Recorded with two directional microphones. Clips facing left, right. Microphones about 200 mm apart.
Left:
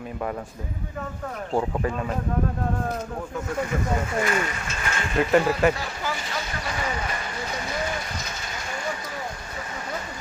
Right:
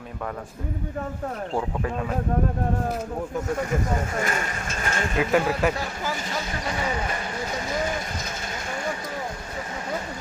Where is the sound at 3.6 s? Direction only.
45° right (ahead or behind).